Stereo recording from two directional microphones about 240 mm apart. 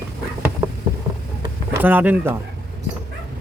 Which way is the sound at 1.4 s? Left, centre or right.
Centre.